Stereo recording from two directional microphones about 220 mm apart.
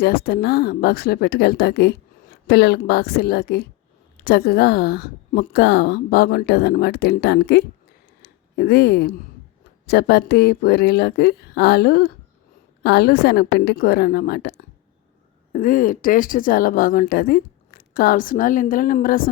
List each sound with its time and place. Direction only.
0.0 s a woman's voice: 45° left (ahead or behind)
8.2 s a sound: 45° left (ahead or behind)
9.8 s a woman's voice: 45° left (ahead or behind)
15.5 s speech: 40° left (ahead or behind)